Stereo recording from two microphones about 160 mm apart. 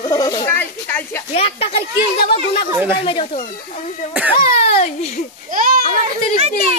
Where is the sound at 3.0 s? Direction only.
35° left (ahead or behind).